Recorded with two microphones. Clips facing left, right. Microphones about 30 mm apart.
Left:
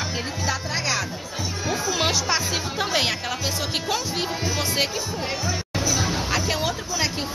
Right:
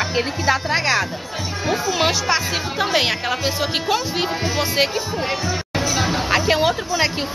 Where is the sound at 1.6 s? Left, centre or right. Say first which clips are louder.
Right 5 dB; centre.